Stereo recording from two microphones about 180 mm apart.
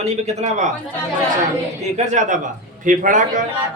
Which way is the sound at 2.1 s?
45° right (ahead or behind).